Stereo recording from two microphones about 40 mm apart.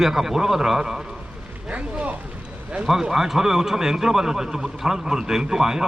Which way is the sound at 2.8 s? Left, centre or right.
Centre.